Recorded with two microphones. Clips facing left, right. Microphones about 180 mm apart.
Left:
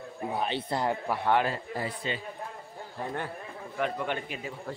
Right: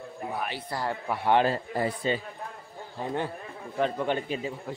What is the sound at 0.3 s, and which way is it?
Speech, 25° left (ahead or behind).